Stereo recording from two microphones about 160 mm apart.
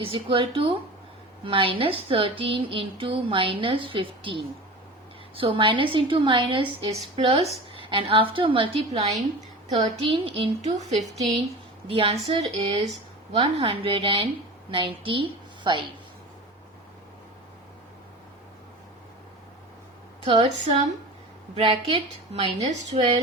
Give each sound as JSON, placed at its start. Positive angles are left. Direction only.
{"t": 0.0, "sound": "a woman's voice", "side_deg": -35}
{"t": 20.2, "sound": "a woman's voice", "side_deg": -35}
{"t": 21.5, "sound": "a woman's voice", "side_deg": -30}